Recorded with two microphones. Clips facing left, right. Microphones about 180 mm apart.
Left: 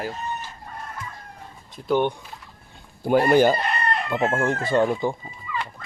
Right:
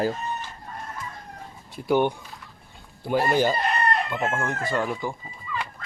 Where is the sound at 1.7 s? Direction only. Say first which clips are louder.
Even; 10° right (ahead or behind).